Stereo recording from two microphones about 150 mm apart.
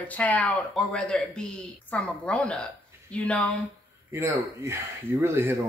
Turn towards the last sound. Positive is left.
turn(degrees=-15)  # may be behind; listen again after turning